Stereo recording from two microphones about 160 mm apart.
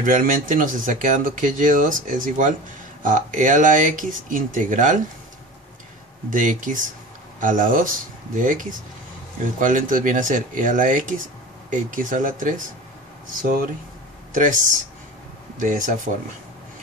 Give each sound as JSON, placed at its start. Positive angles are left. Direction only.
{"t": 0.0, "sound": "speech", "side_deg": -55}
{"t": 6.3, "sound": "speech", "side_deg": -55}